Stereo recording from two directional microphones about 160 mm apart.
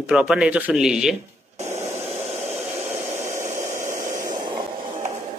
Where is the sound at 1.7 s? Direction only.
15° right (ahead or behind).